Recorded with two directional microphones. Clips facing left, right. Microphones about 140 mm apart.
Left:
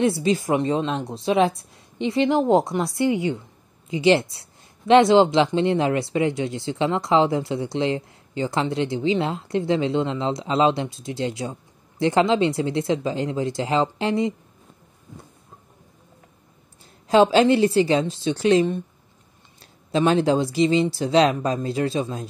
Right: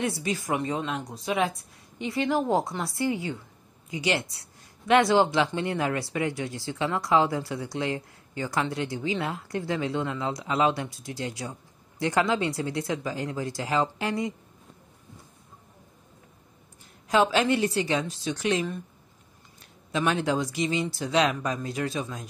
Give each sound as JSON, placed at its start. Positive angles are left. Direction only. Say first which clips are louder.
{"t": 0.0, "sound": "speech", "louder": "left 9 dB", "side_deg": 25}
{"t": 17.1, "sound": "speech", "louder": "left 7 dB", "side_deg": 30}